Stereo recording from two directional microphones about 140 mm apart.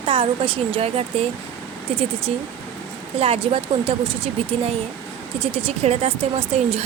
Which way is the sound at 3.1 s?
45° right (ahead or behind).